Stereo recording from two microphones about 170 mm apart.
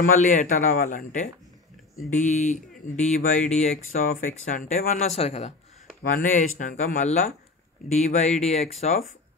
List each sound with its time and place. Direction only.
0.0 s speech: 50° left (ahead or behind)
6.0 s speech: 50° left (ahead or behind)